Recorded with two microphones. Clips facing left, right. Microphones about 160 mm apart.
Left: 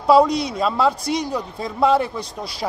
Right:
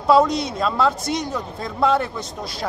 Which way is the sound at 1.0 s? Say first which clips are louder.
Left 2 dB; 35° left (ahead or behind).